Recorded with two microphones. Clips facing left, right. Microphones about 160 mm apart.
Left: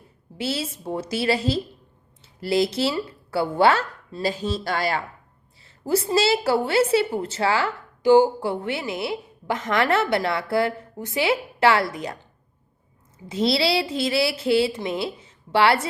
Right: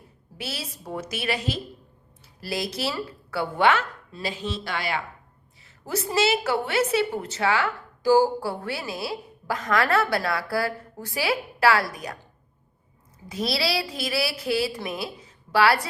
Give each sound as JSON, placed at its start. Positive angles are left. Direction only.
{"t": 0.3, "sound": "a woman's voice", "side_deg": 25}
{"t": 5.6, "sound": "a woman's voice", "side_deg": 30}
{"t": 13.2, "sound": "a woman's voice", "side_deg": 25}